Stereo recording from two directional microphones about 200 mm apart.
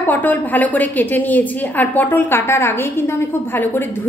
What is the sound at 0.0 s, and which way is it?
A woman's voice, 10° left (ahead or behind).